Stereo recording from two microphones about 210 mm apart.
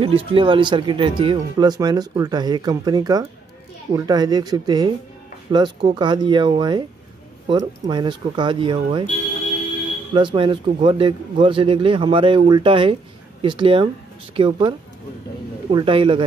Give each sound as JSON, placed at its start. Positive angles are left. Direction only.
{"t": 0.0, "sound": "speech", "side_deg": -25}
{"t": 10.1, "sound": "speech", "side_deg": -25}